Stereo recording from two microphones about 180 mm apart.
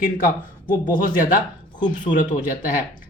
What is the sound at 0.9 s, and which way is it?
Speech, 50° left (ahead or behind).